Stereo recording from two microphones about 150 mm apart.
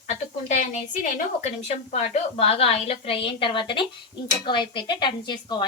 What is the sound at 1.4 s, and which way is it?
A woman's voice, 45° left (ahead or behind).